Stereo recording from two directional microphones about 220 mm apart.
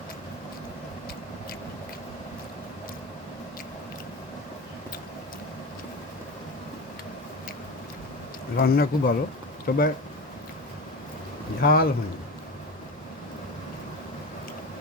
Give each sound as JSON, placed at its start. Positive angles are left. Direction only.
{"t": 8.5, "sound": "speech", "side_deg": 45}
{"t": 11.6, "sound": "speech", "side_deg": 40}